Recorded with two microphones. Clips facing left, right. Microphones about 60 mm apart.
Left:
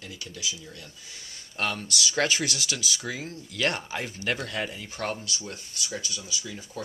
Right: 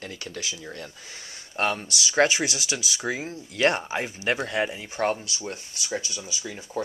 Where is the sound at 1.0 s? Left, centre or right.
Right.